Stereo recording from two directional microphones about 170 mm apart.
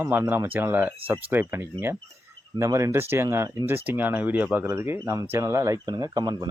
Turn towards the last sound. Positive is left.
turn(degrees=-25)  # may be behind; listen again after turning